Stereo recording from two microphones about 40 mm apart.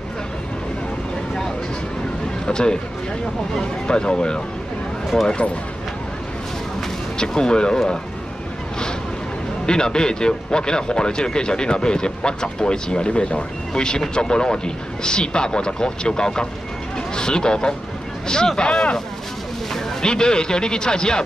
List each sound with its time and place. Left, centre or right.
2.4 s speech: left
7.2 s speech: centre
9.7 s speech: centre